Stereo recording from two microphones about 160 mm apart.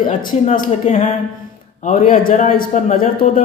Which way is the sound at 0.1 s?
55° left (ahead or behind).